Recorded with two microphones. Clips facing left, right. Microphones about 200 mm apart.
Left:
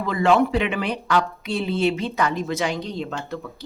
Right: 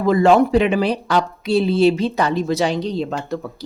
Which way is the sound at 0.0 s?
40° right (ahead or behind).